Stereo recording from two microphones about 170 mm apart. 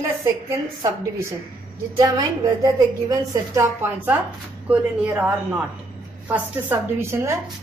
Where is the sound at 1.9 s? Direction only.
25° right (ahead or behind).